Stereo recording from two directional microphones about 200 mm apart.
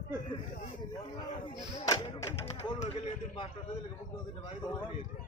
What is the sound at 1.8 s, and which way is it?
Thump, 15° left (ahead or behind).